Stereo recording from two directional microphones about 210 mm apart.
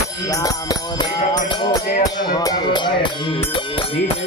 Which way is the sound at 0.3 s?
15° left (ahead or behind).